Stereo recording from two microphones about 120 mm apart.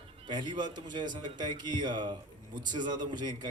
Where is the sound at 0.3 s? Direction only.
40° right (ahead or behind).